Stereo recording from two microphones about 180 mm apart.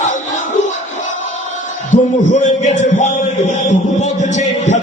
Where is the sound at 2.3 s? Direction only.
40° left (ahead or behind).